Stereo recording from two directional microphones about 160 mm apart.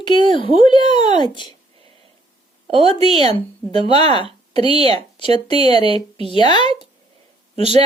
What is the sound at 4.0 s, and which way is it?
Speech, 30° left (ahead or behind).